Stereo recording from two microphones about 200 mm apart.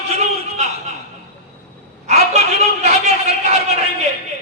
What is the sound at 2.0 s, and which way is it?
A man's voice, 35° right (ahead or behind).